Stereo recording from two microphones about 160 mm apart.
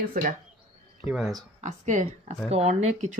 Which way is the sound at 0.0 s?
55° right (ahead or behind).